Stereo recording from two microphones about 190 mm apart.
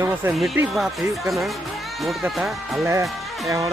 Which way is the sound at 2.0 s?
Centre (ahead or behind).